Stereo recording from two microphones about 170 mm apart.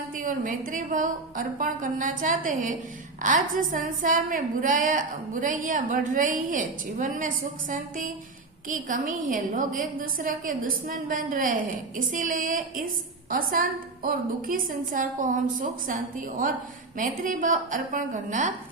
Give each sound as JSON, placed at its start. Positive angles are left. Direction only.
{"t": 0.2, "sound": "a woman's voice", "side_deg": -50}